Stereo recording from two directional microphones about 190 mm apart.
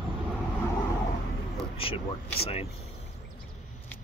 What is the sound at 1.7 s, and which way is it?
Speech, 30° left (ahead or behind).